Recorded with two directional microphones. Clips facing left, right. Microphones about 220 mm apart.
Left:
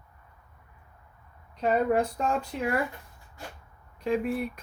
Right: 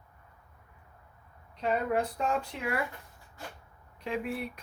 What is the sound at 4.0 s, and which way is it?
Speech, 45° left (ahead or behind).